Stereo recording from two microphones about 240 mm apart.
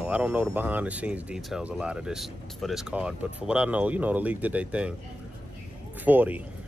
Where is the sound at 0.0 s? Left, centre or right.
Centre.